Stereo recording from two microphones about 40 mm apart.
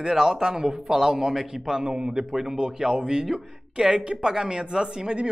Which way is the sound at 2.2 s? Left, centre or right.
Centre.